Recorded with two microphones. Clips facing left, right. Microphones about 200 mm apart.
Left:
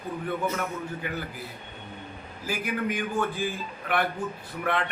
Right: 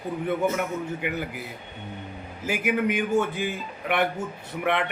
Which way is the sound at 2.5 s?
20° right (ahead or behind).